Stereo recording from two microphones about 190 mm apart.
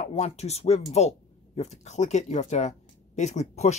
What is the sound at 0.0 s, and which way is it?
Speech, 35° left (ahead or behind).